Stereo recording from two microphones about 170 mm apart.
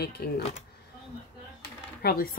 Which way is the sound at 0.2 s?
60° left (ahead or behind).